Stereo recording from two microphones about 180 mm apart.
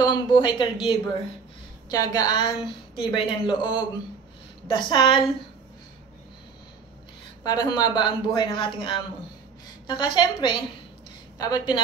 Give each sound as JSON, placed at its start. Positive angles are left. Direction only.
{"t": 0.0, "sound": "a woman's voice", "side_deg": 25}
{"t": 7.4, "sound": "a woman's voice", "side_deg": 20}